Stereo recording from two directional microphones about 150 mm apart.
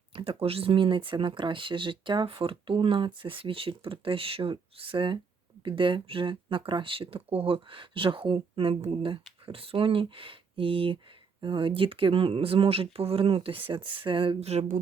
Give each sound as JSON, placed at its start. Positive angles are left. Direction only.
{"t": 0.1, "sound": "speech", "side_deg": -35}